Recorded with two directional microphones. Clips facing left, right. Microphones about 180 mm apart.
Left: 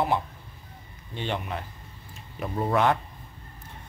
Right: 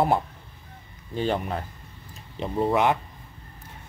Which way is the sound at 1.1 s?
40° right (ahead or behind).